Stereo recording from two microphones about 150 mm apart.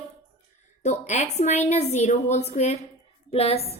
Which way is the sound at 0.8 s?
50° left (ahead or behind).